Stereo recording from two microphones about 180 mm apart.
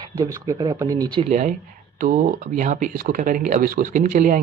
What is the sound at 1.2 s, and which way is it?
Speech, 40° right (ahead or behind).